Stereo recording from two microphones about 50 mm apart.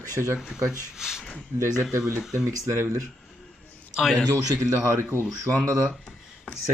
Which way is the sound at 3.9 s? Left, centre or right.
Centre.